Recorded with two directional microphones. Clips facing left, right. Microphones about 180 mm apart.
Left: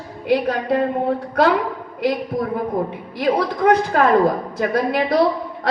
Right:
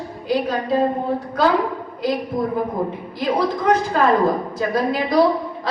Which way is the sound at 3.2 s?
60° left (ahead or behind).